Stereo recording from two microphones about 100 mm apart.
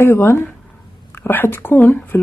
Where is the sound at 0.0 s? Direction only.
25° left (ahead or behind).